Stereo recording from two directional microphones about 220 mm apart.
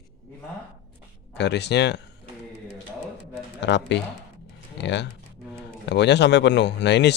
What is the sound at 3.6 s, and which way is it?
A man's voice, 50° left (ahead or behind).